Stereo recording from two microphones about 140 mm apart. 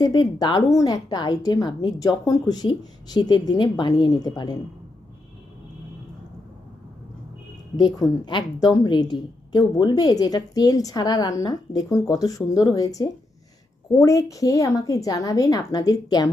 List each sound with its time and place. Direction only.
0.0 s a woman's voice: 30° left (ahead or behind)
7.8 s a woman's voice: 30° left (ahead or behind)